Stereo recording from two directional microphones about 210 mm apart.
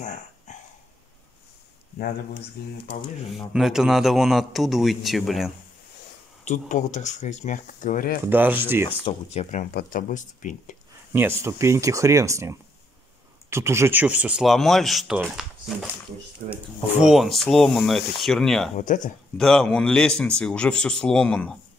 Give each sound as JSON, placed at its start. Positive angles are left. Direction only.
{"t": 2.6, "sound": "speech", "side_deg": 50}
{"t": 3.3, "sound": "speech", "side_deg": 0}
{"t": 6.4, "sound": "speech", "side_deg": 35}
{"t": 8.3, "sound": "speech", "side_deg": -10}
{"t": 8.8, "sound": "speech", "side_deg": 30}
{"t": 11.1, "sound": "speech", "side_deg": -10}
{"t": 16.4, "sound": "speech", "side_deg": -40}
{"t": 17.0, "sound": "speech", "side_deg": 0}
{"t": 18.8, "sound": "speech", "side_deg": 35}
{"t": 19.3, "sound": "speech", "side_deg": 5}